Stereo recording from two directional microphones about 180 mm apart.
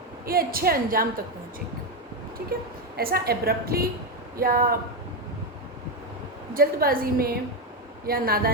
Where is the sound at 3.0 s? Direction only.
60° right (ahead or behind).